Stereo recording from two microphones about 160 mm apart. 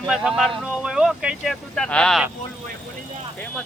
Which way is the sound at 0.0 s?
5° right (ahead or behind).